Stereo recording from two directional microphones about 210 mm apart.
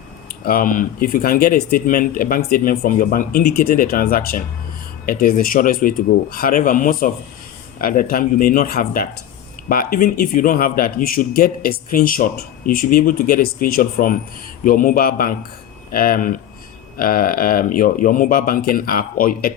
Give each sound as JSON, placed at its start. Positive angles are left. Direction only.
{"t": 0.3, "sound": "speech", "side_deg": 45}